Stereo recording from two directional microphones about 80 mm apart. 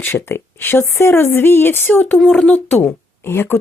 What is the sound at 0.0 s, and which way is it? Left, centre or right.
Speech, left.